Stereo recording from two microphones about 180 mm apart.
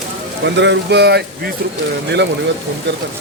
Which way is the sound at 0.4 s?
80° right.